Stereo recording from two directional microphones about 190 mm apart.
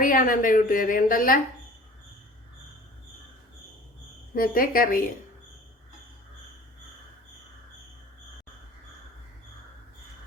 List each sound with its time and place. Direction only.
0.0 s a woman's voice: 45° left (ahead or behind)
4.4 s a woman's voice: 50° left (ahead or behind)